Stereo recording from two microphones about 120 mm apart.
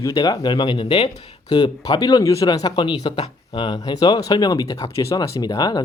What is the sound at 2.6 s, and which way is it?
Speech, 50° left (ahead or behind).